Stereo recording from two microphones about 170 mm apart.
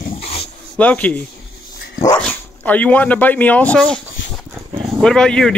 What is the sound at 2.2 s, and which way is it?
Speech, 10° left (ahead or behind).